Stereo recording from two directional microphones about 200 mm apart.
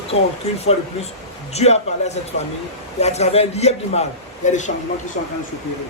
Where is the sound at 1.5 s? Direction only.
35° left (ahead or behind).